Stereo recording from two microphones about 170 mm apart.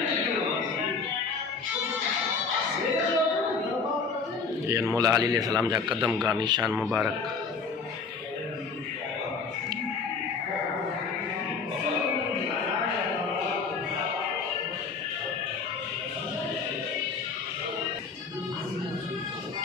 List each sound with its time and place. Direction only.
4.9 s speech: 20° right (ahead or behind)
5.9 s speech: 5° right (ahead or behind)
6.2 s speech: 25° right (ahead or behind)
6.6 s speech: 5° right (ahead or behind)